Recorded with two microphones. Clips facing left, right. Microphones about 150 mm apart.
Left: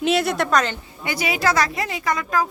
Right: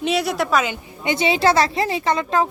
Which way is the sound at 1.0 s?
25° right (ahead or behind).